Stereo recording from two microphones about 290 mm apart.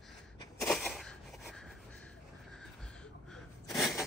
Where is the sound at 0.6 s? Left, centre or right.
Centre.